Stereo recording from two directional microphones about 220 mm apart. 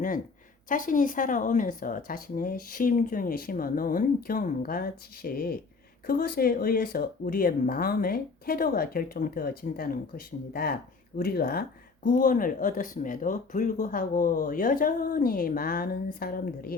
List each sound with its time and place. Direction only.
0.7 s speech: 35° left (ahead or behind)